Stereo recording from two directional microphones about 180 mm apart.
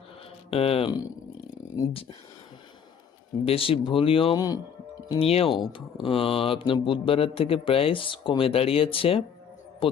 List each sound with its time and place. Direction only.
0.5 s speech: 35° left (ahead or behind)
3.4 s speech: 30° left (ahead or behind)
5.2 s speech: 30° left (ahead or behind)
9.8 s a sound: 30° left (ahead or behind)